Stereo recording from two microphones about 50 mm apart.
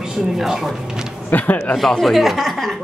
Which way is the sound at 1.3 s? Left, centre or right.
Left.